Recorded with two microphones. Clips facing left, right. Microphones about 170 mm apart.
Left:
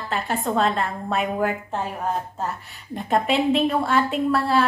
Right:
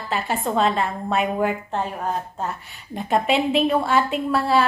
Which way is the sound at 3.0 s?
Centre (ahead or behind).